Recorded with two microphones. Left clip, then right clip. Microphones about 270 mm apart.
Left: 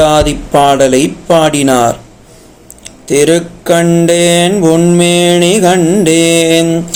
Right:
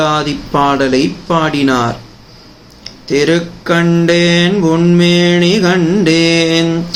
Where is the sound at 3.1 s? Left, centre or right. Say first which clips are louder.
Left 4 dB; centre.